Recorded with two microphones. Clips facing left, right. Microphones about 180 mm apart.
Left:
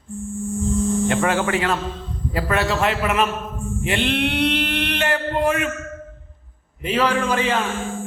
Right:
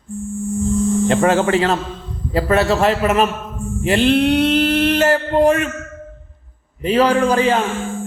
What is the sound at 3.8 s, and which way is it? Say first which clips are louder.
Mantra: right 8 dB; 35° right (ahead or behind).